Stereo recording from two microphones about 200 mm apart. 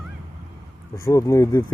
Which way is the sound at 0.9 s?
15° left (ahead or behind).